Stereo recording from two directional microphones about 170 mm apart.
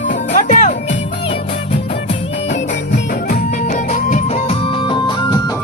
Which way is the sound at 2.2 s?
90° left.